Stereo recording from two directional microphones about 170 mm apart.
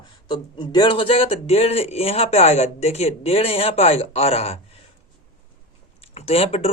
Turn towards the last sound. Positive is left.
turn(degrees=35)  # may be behind; listen again after turning